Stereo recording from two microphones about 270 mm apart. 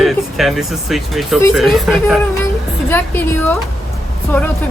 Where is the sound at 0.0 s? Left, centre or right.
Centre.